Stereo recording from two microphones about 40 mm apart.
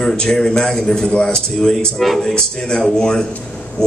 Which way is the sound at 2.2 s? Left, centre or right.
Centre.